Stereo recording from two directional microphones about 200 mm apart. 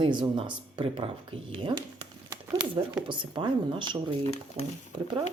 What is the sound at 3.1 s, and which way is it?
Speech, 25° right (ahead or behind).